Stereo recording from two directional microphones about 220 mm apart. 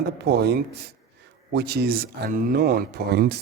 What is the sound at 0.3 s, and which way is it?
Speech, 50° right (ahead or behind).